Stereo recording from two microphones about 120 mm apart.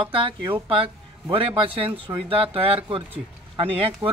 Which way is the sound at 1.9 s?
50° right (ahead or behind).